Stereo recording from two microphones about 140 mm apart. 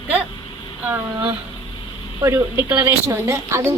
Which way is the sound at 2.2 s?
20° right (ahead or behind).